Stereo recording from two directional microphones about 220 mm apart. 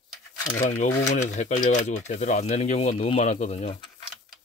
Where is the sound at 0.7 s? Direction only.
30° left (ahead or behind).